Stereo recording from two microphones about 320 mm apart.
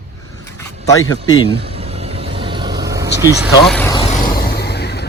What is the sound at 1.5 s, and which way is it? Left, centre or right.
Vehicle, centre.